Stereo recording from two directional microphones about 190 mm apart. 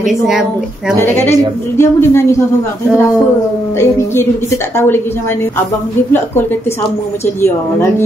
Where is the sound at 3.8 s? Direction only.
15° left (ahead or behind).